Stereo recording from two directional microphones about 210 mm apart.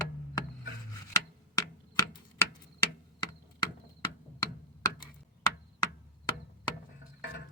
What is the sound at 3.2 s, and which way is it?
Chop, 20° left (ahead or behind).